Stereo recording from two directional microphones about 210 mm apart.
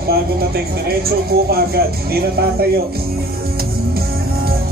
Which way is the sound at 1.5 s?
45° right (ahead or behind).